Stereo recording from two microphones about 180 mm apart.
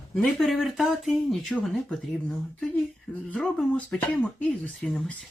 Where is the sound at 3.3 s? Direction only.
5° left (ahead or behind).